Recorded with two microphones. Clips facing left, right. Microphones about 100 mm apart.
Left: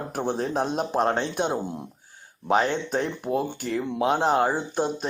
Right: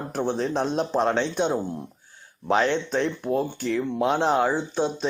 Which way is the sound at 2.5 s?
10° left (ahead or behind).